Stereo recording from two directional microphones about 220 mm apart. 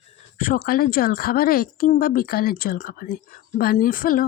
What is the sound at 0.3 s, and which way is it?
Speech, 40° left (ahead or behind).